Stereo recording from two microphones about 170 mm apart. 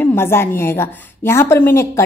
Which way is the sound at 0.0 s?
15° left (ahead or behind).